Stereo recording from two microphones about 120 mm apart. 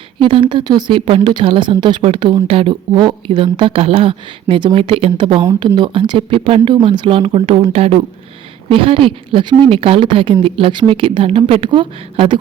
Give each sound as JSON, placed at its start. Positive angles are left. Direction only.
{"t": 0.2, "sound": "a woman's voice", "side_deg": -45}